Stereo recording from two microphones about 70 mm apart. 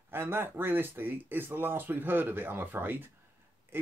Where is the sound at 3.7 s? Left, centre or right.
Right.